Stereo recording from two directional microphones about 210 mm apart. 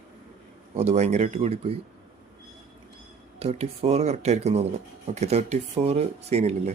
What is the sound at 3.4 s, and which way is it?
Speech, 30° right (ahead or behind).